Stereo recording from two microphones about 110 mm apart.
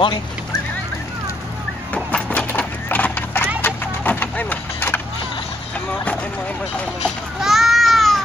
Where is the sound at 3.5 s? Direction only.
15° left (ahead or behind).